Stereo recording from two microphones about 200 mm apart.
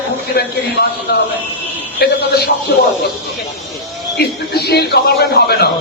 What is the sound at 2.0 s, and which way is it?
Speech, 50° left (ahead or behind).